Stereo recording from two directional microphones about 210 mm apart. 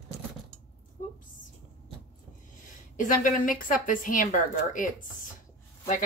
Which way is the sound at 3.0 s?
40° left (ahead or behind).